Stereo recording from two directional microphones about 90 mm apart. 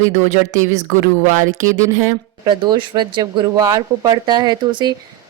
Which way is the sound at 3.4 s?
40° right (ahead or behind).